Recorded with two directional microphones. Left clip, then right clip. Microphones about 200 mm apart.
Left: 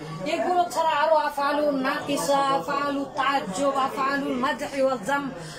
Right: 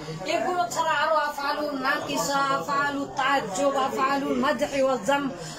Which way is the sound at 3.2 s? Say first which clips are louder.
Right 1 dB; centre (ahead or behind).